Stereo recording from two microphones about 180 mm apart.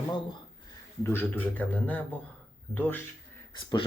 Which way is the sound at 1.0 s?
10° left (ahead or behind).